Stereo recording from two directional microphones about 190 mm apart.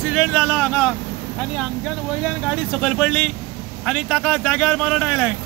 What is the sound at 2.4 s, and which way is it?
Speech, 5° left (ahead or behind).